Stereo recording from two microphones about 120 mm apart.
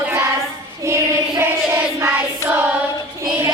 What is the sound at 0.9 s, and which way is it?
Child singing, 20° right (ahead or behind).